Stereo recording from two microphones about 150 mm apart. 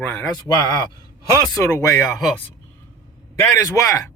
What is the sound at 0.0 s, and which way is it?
Speech, 15° left (ahead or behind).